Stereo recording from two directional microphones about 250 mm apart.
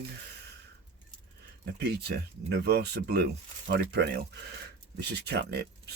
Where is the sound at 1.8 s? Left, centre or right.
Right.